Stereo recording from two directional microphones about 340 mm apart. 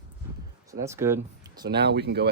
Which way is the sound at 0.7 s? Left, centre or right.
Centre.